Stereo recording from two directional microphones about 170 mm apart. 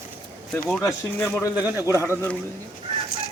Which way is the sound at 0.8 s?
10° left (ahead or behind).